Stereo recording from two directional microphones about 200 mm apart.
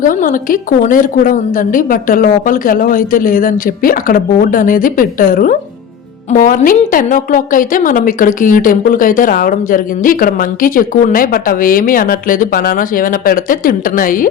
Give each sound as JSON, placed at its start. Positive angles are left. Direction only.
{"t": 0.0, "sound": "a woman's voice", "side_deg": 40}